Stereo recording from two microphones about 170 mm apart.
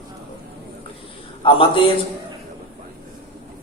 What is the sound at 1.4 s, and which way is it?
Speech, 30° left (ahead or behind).